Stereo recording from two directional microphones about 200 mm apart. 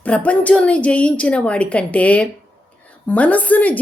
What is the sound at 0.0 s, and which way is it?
A woman's voice, 5° left (ahead or behind).